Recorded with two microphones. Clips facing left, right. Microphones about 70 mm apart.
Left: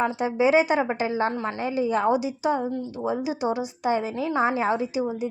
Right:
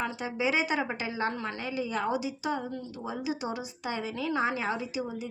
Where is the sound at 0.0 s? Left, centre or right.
Left.